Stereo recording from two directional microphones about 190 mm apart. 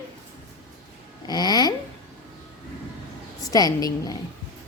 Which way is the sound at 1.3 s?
20° left (ahead or behind).